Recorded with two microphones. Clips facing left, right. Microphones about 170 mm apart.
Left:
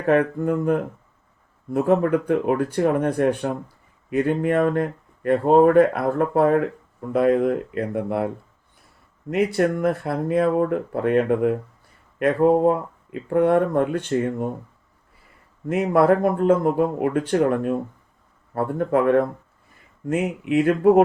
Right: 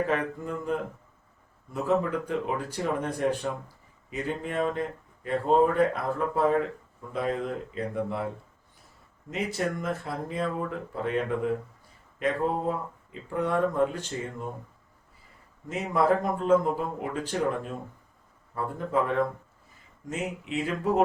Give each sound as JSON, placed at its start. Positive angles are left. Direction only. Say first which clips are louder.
{"t": 0.0, "sound": "speech", "louder": "left 9 dB", "side_deg": 60}
{"t": 9.3, "sound": "speech", "louder": "left 10 dB", "side_deg": 60}
{"t": 15.6, "sound": "speech", "louder": "left 8 dB", "side_deg": 60}